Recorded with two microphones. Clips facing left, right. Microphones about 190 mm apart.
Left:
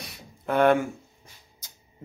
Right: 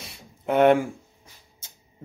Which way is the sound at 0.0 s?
25° right (ahead or behind).